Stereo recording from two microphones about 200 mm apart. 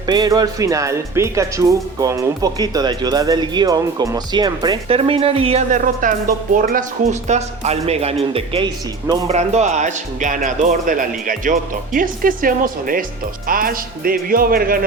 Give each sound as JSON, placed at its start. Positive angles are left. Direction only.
{"t": 0.0, "sound": "speech", "side_deg": -20}